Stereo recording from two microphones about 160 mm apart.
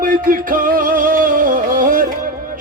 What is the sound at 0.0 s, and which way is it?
Music, 60° right (ahead or behind).